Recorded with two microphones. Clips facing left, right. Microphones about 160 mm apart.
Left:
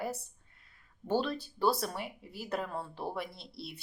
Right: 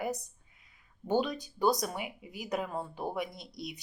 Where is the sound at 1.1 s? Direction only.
15° right (ahead or behind).